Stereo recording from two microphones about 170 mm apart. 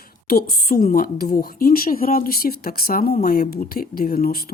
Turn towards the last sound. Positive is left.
turn(degrees=60)  # may be behind; listen again after turning